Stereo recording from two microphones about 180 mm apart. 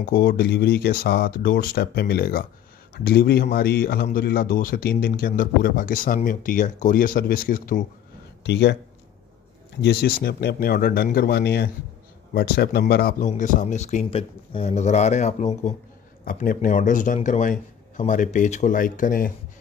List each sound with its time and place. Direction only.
0.0 s a man's voice: 55° left (ahead or behind)
8.5 s speech: 65° left (ahead or behind)
9.8 s speech: 65° left (ahead or behind)
13.3 s a man's voice: 45° left (ahead or behind)